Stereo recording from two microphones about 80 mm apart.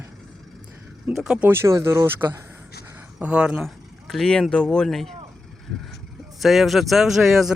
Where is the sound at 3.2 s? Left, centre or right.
Centre.